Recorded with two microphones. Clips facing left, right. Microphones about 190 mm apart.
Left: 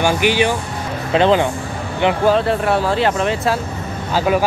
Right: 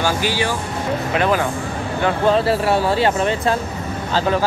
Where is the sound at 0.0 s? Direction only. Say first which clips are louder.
Left 4 dB; 20° left (ahead or behind).